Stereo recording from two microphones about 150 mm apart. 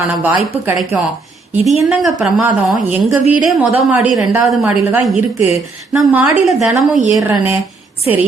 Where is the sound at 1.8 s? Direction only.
Centre (ahead or behind).